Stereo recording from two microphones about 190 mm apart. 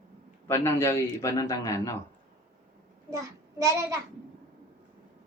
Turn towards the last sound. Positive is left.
turn(degrees=-15)  # may be behind; listen again after turning